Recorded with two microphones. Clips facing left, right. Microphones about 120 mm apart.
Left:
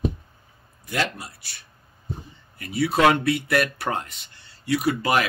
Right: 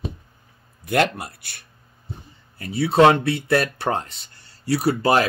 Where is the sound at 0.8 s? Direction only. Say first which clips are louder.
Right 7 dB; 60° right (ahead or behind).